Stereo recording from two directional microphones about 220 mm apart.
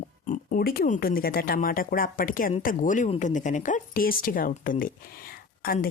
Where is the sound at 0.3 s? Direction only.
40° left (ahead or behind).